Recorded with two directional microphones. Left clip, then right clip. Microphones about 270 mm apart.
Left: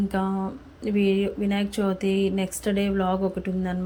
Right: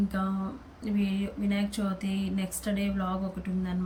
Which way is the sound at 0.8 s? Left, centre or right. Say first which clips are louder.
Left 10 dB; centre.